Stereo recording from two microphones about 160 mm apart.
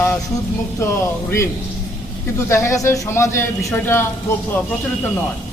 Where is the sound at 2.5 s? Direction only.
15° left (ahead or behind).